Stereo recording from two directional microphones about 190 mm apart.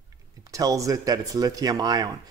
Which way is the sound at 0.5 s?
15° right (ahead or behind).